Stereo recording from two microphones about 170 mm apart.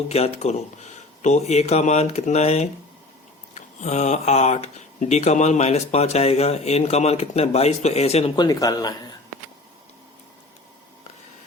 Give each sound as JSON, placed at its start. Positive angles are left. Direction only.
{"t": 0.1, "sound": "speech", "side_deg": 40}
{"t": 8.4, "sound": "speech", "side_deg": 20}